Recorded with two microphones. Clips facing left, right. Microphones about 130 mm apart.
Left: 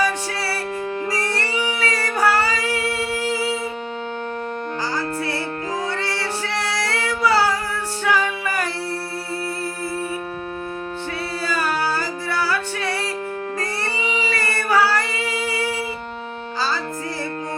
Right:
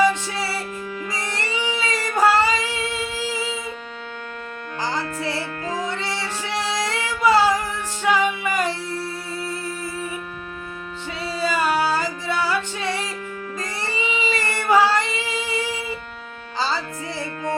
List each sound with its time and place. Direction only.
1.4 s music: 20° right (ahead or behind)
5.9 s music: 20° right (ahead or behind)
11.4 s music: 20° right (ahead or behind)
14.0 s a sound: 20° right (ahead or behind)
16.6 s music: 20° right (ahead or behind)